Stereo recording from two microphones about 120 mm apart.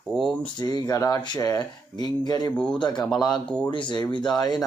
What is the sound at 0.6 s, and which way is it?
Speech, 35° left (ahead or behind).